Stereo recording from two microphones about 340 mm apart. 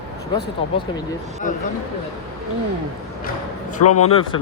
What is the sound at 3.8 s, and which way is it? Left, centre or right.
Speech, left.